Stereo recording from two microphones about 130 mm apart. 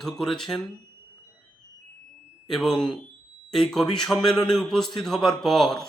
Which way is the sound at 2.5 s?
5° left (ahead or behind).